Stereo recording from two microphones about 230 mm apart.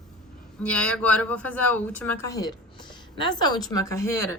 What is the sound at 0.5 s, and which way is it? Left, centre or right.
Speech, centre.